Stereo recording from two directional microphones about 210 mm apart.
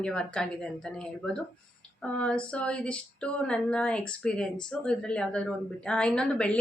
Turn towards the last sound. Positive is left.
turn(degrees=5)  # may be behind; listen again after turning